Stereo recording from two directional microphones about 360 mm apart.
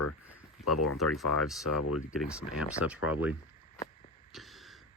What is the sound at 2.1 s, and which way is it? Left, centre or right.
Speech, centre.